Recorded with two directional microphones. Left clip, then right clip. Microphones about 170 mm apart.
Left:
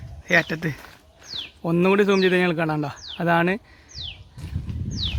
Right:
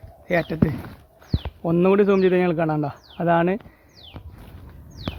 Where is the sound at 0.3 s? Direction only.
10° left (ahead or behind).